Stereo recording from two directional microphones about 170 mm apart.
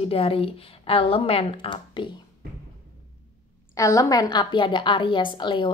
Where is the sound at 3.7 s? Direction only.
20° left (ahead or behind).